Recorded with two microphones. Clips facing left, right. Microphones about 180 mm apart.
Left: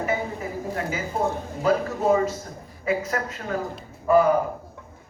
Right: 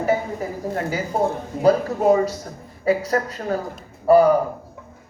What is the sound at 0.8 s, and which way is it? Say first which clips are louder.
A man's voice: right 5 dB; 40° right (ahead or behind).